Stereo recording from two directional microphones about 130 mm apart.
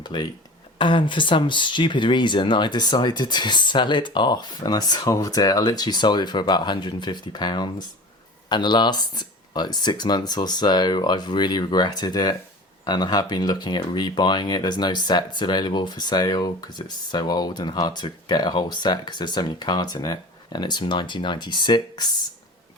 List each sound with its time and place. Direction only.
0.0 s speech: 35° left (ahead or behind)